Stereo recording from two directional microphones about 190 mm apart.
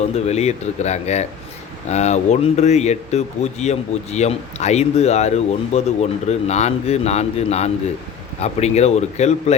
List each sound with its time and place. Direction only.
0.0 s speech: 35° left (ahead or behind)